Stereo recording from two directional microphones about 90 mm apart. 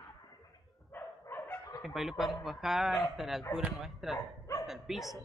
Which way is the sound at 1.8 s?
5° right (ahead or behind).